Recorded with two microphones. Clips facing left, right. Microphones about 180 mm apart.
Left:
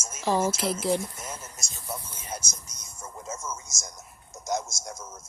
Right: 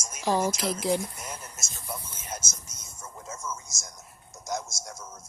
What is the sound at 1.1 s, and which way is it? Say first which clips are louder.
Speech: left 1 dB; 25° left (ahead or behind).